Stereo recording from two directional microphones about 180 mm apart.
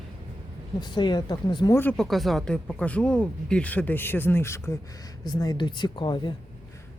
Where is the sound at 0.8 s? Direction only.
25° left (ahead or behind).